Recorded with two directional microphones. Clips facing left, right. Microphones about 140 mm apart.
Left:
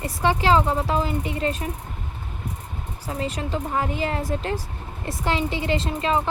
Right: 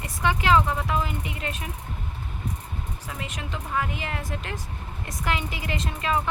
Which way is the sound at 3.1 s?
35° left (ahead or behind).